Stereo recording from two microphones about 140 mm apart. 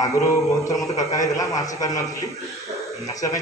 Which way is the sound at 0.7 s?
25° left (ahead or behind).